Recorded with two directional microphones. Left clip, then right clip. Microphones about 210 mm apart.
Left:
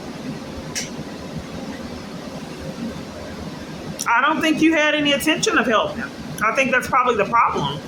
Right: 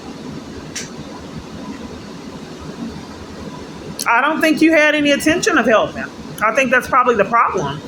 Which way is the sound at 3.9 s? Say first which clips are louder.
Right 3 dB; 15° right (ahead or behind).